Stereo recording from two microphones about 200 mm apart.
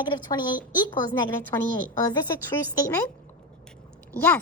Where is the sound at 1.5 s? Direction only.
15° left (ahead or behind).